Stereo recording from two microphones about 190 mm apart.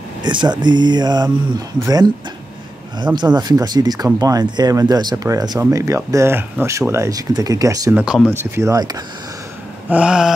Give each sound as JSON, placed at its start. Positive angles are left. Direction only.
{"t": 0.2, "sound": "speech", "side_deg": -25}
{"t": 7.9, "sound": "speech", "side_deg": -5}
{"t": 9.8, "sound": "a sound", "side_deg": -5}